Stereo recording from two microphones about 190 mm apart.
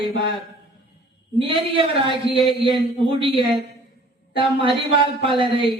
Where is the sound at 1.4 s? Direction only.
30° right (ahead or behind).